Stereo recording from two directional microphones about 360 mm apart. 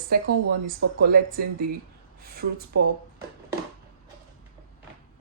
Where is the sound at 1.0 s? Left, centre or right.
Right.